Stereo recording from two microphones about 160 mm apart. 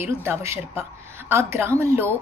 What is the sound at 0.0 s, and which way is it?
Speech, 15° right (ahead or behind).